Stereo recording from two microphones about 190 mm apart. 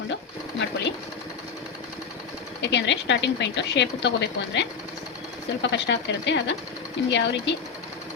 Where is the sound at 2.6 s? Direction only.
65° left (ahead or behind).